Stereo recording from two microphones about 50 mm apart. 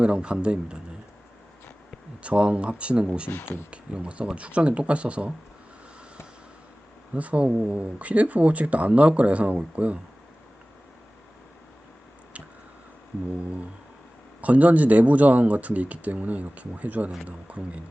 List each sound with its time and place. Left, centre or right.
0.0 s speech: centre
2.2 s speech: right
3.2 s speech: left
3.7 s speech: right
7.1 s speech: right
14.4 s speech: right